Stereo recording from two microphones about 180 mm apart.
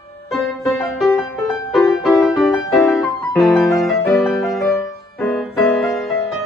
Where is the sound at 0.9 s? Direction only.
Centre (ahead or behind).